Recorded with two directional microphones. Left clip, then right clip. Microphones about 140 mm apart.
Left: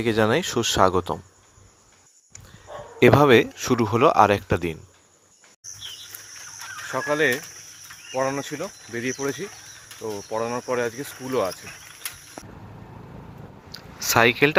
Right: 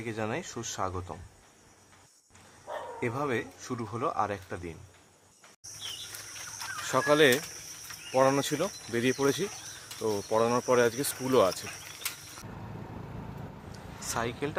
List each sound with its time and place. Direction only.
0.0 s speech: 65° left (ahead or behind)
3.0 s speech: 75° left (ahead or behind)
6.8 s speech: 15° right (ahead or behind)
11.6 s cricket: 10° right (ahead or behind)
14.2 s speech: 35° left (ahead or behind)